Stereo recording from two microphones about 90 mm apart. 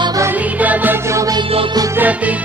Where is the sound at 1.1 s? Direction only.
35° right (ahead or behind).